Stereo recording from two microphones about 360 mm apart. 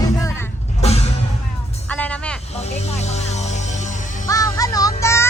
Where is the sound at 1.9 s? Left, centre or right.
Centre.